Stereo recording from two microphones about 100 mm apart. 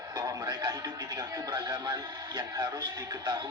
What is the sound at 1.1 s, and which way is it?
Speech, 40° right (ahead or behind).